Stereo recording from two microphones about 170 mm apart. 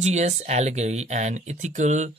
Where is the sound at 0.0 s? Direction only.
40° right (ahead or behind).